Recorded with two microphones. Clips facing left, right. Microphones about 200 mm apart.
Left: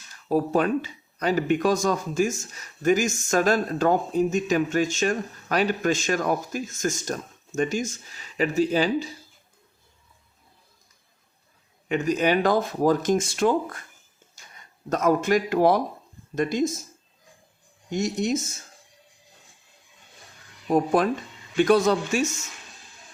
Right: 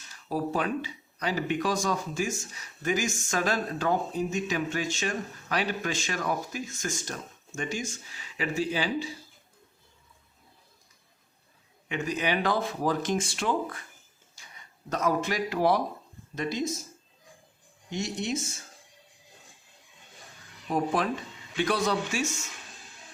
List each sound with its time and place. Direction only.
0.3 s speech: 45° left (ahead or behind)
11.9 s speech: 45° left (ahead or behind)
14.8 s speech: 45° left (ahead or behind)
17.9 s speech: 45° left (ahead or behind)
20.7 s speech: 45° left (ahead or behind)